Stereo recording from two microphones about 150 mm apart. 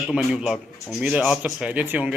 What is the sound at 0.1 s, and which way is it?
Speech, 5° right (ahead or behind).